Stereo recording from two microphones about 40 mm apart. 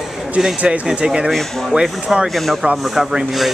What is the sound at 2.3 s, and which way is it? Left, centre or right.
Speech, centre.